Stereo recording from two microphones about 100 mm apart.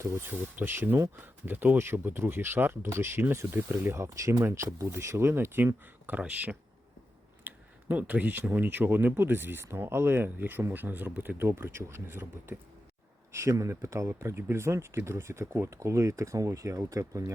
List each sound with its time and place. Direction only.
0.0 s speech: 25° right (ahead or behind)